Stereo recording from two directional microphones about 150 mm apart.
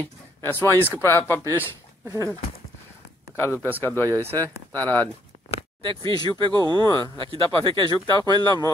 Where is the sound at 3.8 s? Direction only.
15° left (ahead or behind).